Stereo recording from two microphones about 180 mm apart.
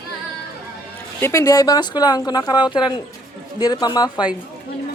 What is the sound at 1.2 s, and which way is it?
A woman's voice, 15° left (ahead or behind).